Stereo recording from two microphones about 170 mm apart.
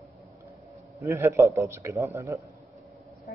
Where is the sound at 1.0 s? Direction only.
15° right (ahead or behind).